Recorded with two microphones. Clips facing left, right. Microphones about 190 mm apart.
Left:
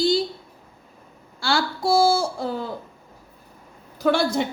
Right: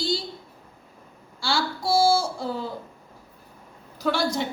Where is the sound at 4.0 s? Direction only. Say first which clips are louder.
Left 4 dB; 55° left (ahead or behind).